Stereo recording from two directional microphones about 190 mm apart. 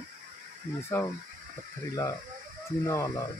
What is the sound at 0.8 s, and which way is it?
Speech, 10° left (ahead or behind).